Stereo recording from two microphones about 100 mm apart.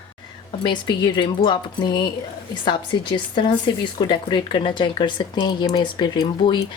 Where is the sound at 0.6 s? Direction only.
50° left (ahead or behind).